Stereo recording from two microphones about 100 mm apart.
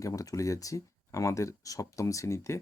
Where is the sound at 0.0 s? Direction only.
35° left (ahead or behind).